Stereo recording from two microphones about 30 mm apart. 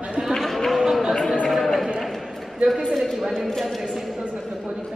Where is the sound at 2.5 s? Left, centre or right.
Centre.